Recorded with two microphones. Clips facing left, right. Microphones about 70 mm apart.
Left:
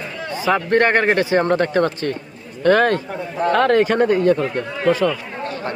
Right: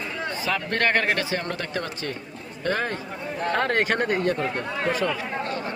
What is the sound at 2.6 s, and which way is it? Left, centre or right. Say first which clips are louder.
Speech: left 12 dB; left.